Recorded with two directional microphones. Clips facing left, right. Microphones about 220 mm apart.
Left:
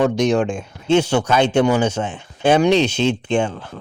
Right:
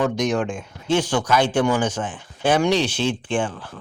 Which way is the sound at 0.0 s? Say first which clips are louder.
Left 5 dB; 25° left (ahead or behind).